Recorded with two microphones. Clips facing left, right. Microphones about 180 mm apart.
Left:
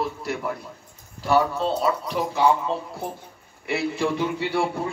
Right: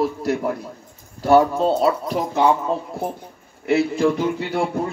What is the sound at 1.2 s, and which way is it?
A man's voice, 45° right (ahead or behind).